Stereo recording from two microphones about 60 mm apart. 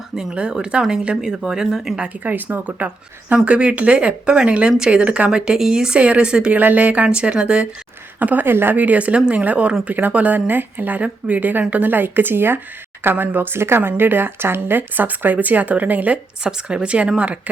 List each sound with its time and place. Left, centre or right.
0.2 s speech: centre
2.0 s speech: right
6.6 s speech: right
8.2 s speech: right
16.4 s speech: centre